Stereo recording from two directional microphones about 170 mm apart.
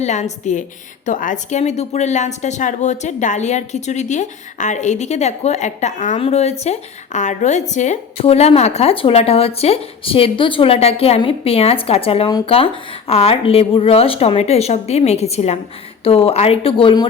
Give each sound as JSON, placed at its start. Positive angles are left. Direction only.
{"t": 0.0, "sound": "a woman's voice", "side_deg": 40}